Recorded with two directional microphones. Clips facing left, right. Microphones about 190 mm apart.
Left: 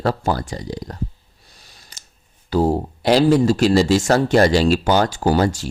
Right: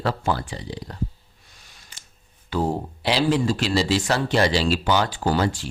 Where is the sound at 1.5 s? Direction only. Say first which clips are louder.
Left 3 dB; 35° left (ahead or behind).